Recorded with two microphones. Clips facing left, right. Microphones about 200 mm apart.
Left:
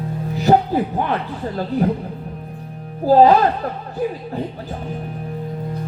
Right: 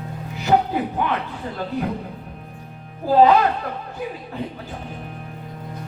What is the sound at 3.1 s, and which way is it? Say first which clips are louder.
Speech: left 3 dB; 35° left (ahead or behind).